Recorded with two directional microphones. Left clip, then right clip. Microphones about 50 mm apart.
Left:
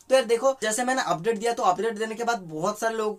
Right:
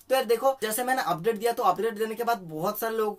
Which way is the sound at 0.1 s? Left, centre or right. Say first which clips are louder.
Left 3 dB; right.